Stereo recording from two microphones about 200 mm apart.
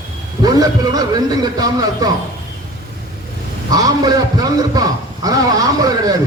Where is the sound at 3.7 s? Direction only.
20° right (ahead or behind).